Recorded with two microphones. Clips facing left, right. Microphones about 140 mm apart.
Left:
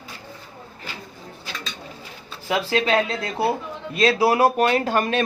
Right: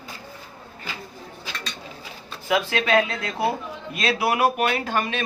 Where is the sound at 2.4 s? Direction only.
30° left (ahead or behind).